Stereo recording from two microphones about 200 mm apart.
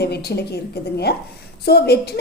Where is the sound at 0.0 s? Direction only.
55° left (ahead or behind).